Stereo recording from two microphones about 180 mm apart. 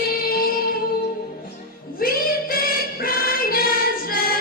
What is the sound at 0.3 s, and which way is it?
Music, 55° left (ahead or behind).